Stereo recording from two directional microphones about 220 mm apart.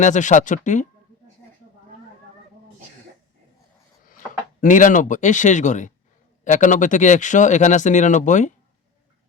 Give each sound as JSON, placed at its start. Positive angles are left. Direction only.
{"t": 0.0, "sound": "speech", "side_deg": 35}
{"t": 4.6, "sound": "speech", "side_deg": 35}